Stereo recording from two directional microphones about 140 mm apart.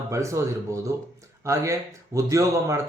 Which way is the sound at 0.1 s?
20° right (ahead or behind).